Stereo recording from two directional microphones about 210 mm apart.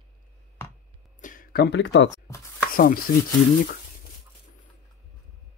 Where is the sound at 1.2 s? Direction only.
45° left (ahead or behind).